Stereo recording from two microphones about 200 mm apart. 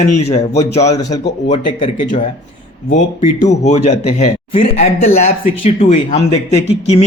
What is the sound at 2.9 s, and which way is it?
Speech, 35° left (ahead or behind).